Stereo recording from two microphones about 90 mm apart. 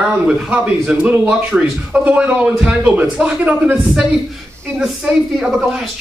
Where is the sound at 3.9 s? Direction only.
5° right (ahead or behind).